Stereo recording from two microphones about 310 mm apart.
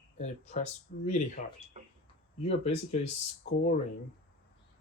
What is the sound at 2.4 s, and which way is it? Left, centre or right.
Speech, left.